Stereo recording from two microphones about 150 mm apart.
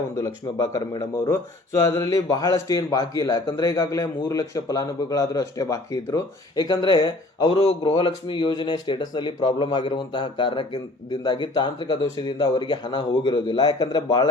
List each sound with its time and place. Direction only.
0.2 s speech: 20° left (ahead or behind)
7.6 s speech: 45° left (ahead or behind); by 14.3 s 25° left (ahead or behind)